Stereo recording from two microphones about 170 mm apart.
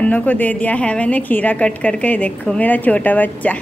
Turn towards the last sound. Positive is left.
turn(degrees=10)  # may be behind; listen again after turning